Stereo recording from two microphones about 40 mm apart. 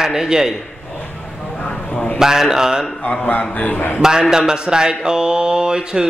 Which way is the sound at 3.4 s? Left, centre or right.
Left.